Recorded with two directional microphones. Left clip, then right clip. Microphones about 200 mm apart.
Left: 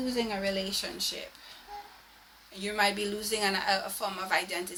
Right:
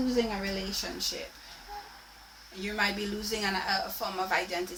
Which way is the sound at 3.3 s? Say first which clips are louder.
Left 2 dB; 50° left (ahead or behind).